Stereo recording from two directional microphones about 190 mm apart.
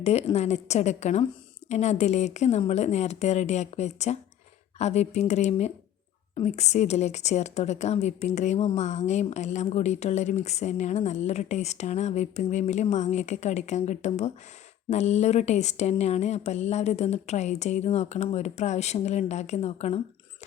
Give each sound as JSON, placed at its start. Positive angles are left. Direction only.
{"t": 0.0, "sound": "a woman's voice", "side_deg": 35}